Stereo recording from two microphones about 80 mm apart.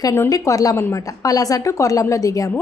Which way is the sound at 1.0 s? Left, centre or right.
Left.